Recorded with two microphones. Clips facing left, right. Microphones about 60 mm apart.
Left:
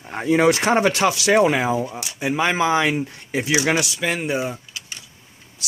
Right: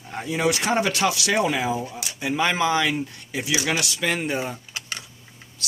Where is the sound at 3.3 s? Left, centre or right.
Left.